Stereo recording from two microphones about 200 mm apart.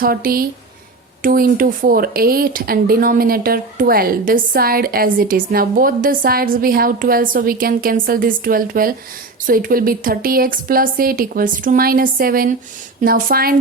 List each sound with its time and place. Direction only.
0.0 s speech: 45° right (ahead or behind)